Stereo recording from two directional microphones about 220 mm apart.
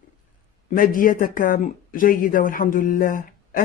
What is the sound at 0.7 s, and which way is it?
Speech, 40° left (ahead or behind).